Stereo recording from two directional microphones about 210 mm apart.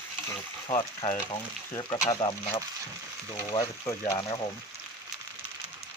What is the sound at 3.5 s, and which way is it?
Speech, 15° left (ahead or behind).